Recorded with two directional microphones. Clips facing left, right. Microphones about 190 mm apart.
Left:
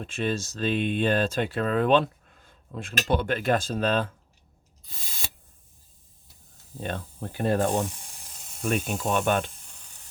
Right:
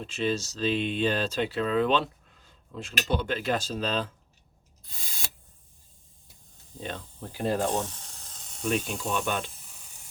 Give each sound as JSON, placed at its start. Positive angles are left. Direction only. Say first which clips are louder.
{"t": 0.0, "sound": "speech", "louder": "even", "side_deg": 50}
{"t": 6.7, "sound": "speech", "louder": "left 4 dB", "side_deg": 55}
{"t": 7.8, "sound": "sizzle", "louder": "left 4 dB", "side_deg": 10}
{"t": 8.7, "sound": "speech", "louder": "left 3 dB", "side_deg": 50}
{"t": 9.5, "sound": "sizzle", "louder": "even", "side_deg": -5}